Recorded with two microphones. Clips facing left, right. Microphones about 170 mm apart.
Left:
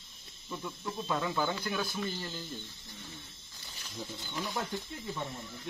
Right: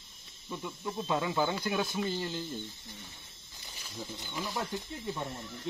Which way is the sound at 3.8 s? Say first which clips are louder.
Even; centre (ahead or behind).